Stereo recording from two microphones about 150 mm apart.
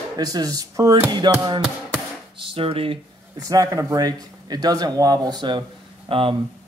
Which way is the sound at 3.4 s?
25° right (ahead or behind).